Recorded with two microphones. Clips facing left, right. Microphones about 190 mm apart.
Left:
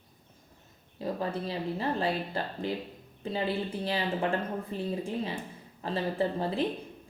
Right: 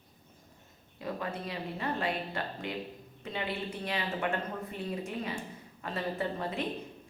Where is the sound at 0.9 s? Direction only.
30° left (ahead or behind).